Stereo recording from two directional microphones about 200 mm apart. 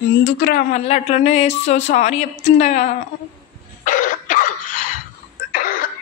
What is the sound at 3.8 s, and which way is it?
Cough, 40° left (ahead or behind).